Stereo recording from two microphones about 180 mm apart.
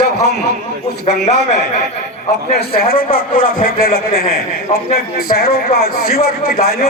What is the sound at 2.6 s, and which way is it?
A man's voice, 55° left (ahead or behind).